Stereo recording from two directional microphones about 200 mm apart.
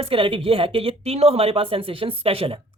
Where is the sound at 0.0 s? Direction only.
25° right (ahead or behind).